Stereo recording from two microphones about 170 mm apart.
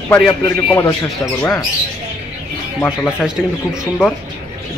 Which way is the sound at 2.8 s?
10° left (ahead or behind).